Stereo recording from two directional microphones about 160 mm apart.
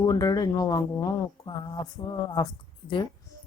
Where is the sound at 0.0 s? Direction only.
25° left (ahead or behind).